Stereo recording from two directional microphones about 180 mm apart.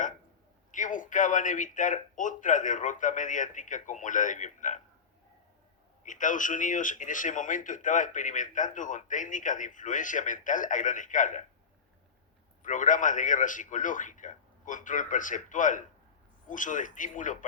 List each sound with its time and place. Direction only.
0.7 s speech: 45° left (ahead or behind)
6.1 s speech: 45° left (ahead or behind)
12.6 s speech: 45° left (ahead or behind)